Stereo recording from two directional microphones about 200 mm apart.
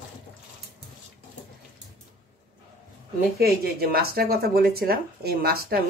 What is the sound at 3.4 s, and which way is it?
Speech, 50° right (ahead or behind).